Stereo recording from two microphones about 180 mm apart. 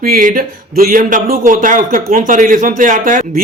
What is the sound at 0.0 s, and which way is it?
Speech, 50° right (ahead or behind).